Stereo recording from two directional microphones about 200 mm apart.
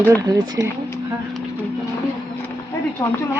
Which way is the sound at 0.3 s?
75° right (ahead or behind).